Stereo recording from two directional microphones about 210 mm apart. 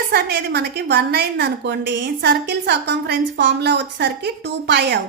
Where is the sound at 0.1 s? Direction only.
50° right (ahead or behind).